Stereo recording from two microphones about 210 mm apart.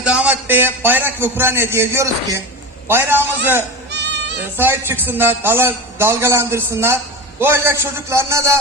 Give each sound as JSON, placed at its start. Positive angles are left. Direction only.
{"t": 0.0, "sound": "a man's voice", "side_deg": -5}
{"t": 3.9, "sound": "bleat", "side_deg": -55}
{"t": 4.5, "sound": "a man's voice", "side_deg": -10}